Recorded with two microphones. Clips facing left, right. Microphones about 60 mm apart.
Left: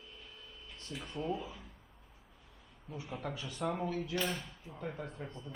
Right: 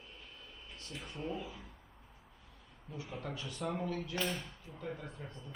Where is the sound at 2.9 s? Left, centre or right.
Centre.